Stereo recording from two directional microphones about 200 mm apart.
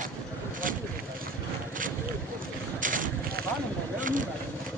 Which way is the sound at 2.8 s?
40° right (ahead or behind).